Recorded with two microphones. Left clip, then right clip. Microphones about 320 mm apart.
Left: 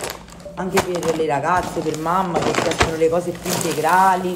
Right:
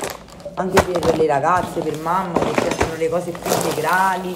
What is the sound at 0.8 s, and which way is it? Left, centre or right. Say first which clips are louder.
Speech: right 3 dB; right.